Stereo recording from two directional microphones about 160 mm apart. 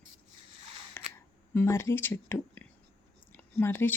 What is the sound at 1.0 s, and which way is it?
Camera, 15° left (ahead or behind).